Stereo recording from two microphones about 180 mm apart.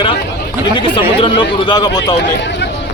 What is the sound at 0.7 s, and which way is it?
Speech, 25° left (ahead or behind).